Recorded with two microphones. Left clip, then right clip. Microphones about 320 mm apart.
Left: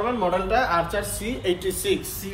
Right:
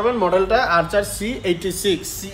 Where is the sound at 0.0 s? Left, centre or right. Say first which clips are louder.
Right 6 dB; right.